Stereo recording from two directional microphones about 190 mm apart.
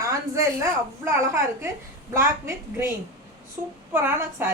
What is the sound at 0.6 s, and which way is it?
A woman's voice, 15° right (ahead or behind).